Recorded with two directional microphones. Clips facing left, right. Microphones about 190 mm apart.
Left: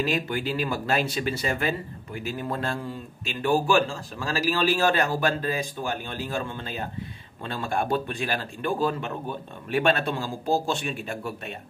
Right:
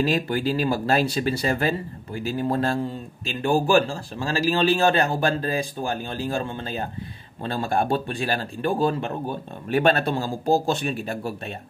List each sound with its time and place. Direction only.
0.0 s speech: 35° right (ahead or behind)